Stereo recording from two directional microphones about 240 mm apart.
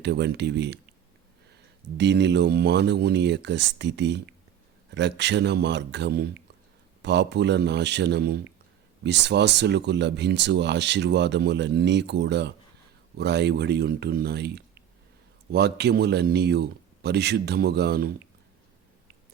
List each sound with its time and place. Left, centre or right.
0.0 s speech: right
2.0 s speech: right